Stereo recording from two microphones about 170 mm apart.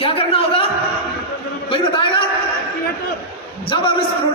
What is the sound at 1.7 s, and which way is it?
Speech, 30° left (ahead or behind).